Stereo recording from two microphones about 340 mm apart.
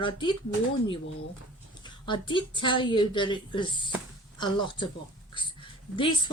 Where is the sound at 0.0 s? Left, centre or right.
Centre.